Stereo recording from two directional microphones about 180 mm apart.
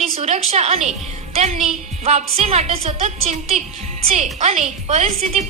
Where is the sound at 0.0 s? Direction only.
35° right (ahead or behind).